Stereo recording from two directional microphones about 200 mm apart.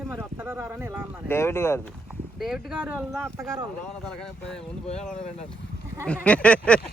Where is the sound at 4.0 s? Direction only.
5° left (ahead or behind).